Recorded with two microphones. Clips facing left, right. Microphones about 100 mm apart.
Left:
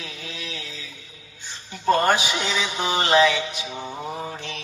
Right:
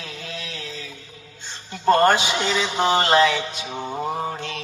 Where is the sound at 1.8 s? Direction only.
45° right (ahead or behind).